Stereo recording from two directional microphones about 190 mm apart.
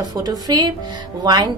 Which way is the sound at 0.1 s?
20° right (ahead or behind).